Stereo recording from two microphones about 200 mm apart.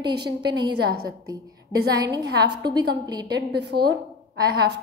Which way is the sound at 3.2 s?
55° right (ahead or behind).